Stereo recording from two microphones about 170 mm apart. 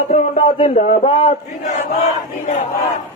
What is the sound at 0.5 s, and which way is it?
A man's voice, 40° left (ahead or behind).